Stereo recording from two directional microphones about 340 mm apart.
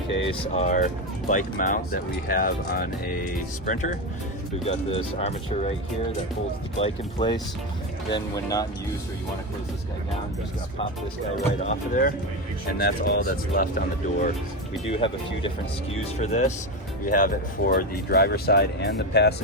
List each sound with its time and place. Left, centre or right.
0.3 s speech: centre
6.7 s speech: centre
11.6 s speech: left